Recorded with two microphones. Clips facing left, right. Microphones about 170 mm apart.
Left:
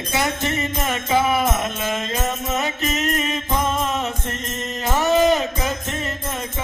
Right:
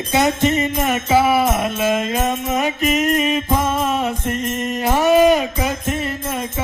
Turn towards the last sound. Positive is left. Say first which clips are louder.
# right 4 dB
turn(degrees=-10)  # may be behind; listen again after turning